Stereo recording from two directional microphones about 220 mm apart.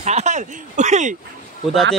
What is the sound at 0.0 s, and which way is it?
Speech, 30° right (ahead or behind).